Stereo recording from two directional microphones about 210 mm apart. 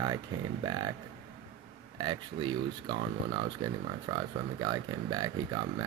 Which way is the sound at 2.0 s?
20° right (ahead or behind).